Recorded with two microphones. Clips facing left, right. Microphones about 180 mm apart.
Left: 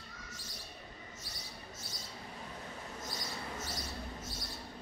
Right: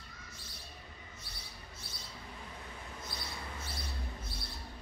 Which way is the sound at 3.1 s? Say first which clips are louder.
Left 2 dB; 40° left (ahead or behind).